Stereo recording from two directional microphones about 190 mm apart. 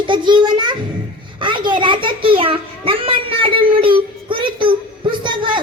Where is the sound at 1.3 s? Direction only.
25° right (ahead or behind).